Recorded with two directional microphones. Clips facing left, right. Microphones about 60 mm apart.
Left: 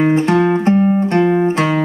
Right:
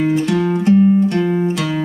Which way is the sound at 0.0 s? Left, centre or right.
Left.